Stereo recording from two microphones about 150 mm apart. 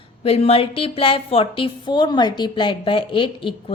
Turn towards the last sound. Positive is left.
turn(degrees=35)  # may be behind; listen again after turning